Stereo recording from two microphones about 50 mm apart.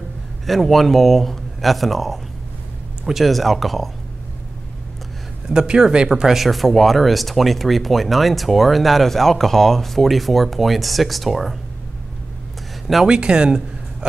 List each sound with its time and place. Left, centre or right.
0.5 s speech: centre
5.5 s speech: centre
13.0 s speech: centre